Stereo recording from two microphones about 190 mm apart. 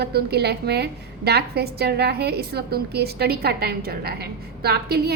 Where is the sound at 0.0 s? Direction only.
60° right (ahead or behind).